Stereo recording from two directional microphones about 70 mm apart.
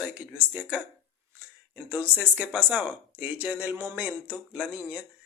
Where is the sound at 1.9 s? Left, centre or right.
Right.